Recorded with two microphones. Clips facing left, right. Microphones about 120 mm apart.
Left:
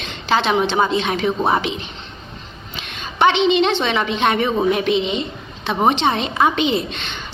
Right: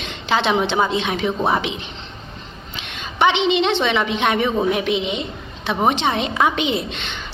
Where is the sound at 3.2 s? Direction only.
20° right (ahead or behind).